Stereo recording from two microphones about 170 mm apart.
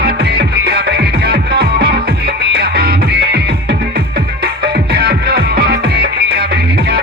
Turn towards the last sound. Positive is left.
turn(degrees=-65)  # may be behind; listen again after turning